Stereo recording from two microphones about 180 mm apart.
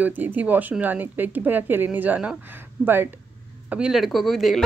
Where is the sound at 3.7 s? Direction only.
5° right (ahead or behind).